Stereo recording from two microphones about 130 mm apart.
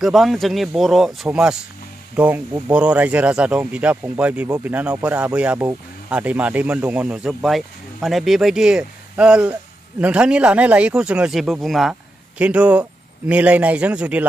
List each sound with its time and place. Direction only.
0.0 s a man's voice: centre (ahead or behind)